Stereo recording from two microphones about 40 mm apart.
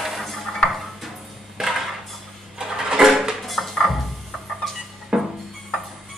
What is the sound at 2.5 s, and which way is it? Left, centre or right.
Music, centre.